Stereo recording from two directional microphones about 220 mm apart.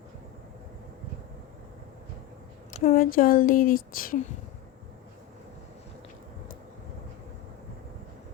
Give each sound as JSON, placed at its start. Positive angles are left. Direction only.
{"t": 2.7, "sound": "speech", "side_deg": 35}